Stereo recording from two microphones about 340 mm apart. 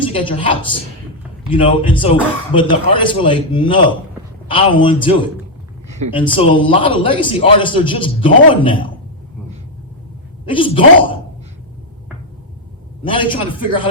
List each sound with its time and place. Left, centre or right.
0.1 s a man's voice: centre
6.1 s a man's voice: centre
10.4 s a man's voice: centre
13.1 s a man's voice: centre